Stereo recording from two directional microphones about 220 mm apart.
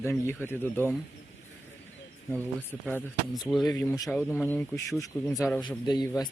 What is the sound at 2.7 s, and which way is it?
Speech, 5° right (ahead or behind).